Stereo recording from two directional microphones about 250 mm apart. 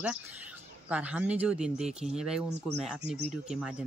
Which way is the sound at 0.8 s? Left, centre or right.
Centre.